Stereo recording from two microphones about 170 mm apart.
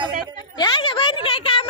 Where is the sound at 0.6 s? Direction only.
30° left (ahead or behind).